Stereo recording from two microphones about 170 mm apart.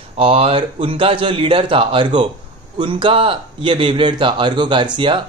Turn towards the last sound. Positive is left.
turn(degrees=-30)  # may be behind; listen again after turning